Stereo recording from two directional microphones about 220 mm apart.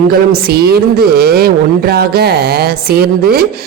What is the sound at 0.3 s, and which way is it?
Speech, 45° right (ahead or behind).